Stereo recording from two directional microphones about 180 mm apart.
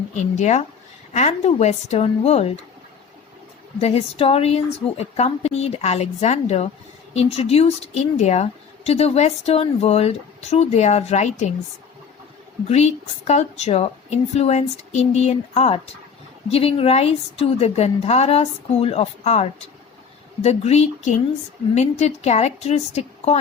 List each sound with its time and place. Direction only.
0.1 s a woman's voice: 40° left (ahead or behind)
3.8 s a woman's voice: 35° left (ahead or behind)
12.6 s a woman's voice: 35° left (ahead or behind)